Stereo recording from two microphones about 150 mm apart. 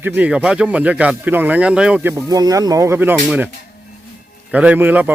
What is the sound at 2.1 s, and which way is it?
Speech, 25° right (ahead or behind).